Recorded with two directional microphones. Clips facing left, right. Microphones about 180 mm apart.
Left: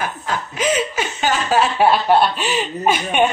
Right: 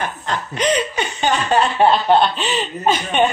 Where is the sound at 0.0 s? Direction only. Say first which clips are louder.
Even; 5° left (ahead or behind).